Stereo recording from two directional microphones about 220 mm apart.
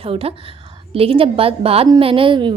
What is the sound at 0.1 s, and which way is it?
A woman's voice, 25° right (ahead or behind).